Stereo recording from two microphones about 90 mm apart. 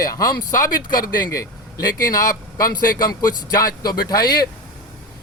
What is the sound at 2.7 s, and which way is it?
Speech, 50° left (ahead or behind).